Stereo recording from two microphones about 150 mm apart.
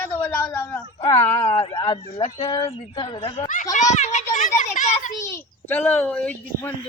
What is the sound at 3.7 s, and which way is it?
A child's voice, 50° left (ahead or behind).